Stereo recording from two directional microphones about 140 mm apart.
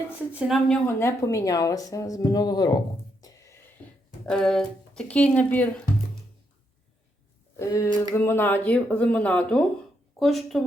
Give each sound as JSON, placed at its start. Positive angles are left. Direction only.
{"t": 0.3, "sound": "speech", "side_deg": 0}
{"t": 0.9, "sound": "speech", "side_deg": 20}
{"t": 4.3, "sound": "speech", "side_deg": 5}
{"t": 7.5, "sound": "speech", "side_deg": 20}